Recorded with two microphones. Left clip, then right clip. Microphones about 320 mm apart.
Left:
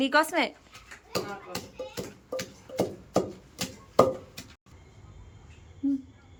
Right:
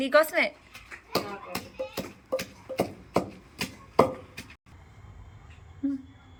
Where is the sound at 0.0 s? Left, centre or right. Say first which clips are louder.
Right 2 dB; centre.